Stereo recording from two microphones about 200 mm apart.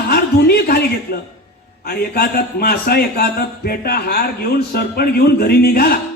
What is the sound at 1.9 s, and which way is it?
A man's voice, 50° left (ahead or behind).